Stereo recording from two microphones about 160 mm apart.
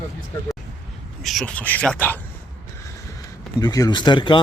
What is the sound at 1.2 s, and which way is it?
Speech, centre (ahead or behind).